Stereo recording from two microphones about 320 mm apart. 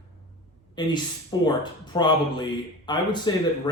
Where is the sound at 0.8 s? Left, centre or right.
Centre.